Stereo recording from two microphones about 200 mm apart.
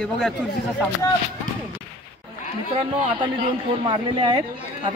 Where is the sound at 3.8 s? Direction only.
25° right (ahead or behind).